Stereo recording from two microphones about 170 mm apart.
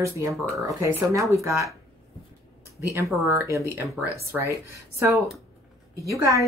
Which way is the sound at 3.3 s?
15° right (ahead or behind).